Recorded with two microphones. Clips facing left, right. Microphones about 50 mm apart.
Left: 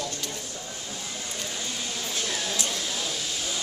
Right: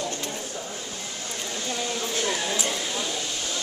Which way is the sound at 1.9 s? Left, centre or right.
Centre.